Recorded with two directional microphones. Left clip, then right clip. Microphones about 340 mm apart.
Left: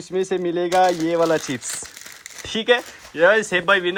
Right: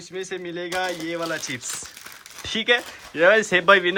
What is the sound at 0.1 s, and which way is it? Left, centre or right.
Speech, centre.